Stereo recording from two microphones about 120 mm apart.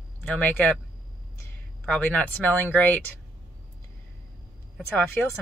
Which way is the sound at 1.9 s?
15° left (ahead or behind).